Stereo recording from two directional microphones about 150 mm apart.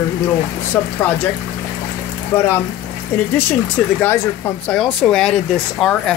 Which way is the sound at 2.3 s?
15° left (ahead or behind).